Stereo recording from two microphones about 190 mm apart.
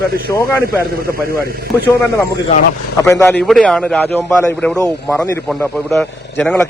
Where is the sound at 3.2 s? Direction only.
Centre (ahead or behind).